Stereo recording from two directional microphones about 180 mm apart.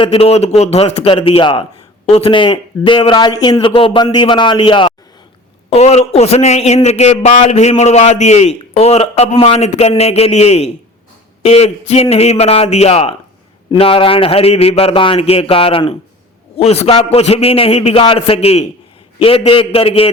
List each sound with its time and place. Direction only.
0.0 s a man's voice: 35° left (ahead or behind)